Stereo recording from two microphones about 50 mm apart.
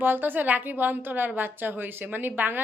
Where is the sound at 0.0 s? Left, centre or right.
Right.